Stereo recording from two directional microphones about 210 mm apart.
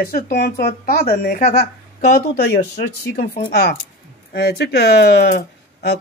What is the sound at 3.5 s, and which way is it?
Speech, 50° left (ahead or behind).